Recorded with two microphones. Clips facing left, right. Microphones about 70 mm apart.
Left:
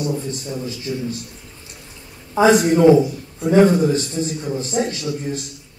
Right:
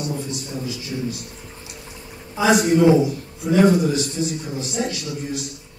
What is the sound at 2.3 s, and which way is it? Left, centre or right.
A man's voice, left.